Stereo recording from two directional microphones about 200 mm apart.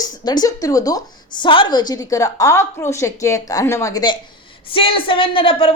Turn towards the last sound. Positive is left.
turn(degrees=25)  # may be behind; listen again after turning